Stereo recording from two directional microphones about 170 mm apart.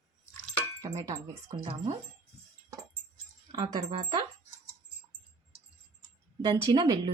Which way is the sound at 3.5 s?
25° right (ahead or behind).